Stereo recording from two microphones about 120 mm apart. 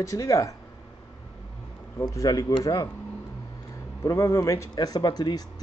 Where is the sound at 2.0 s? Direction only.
30° left (ahead or behind).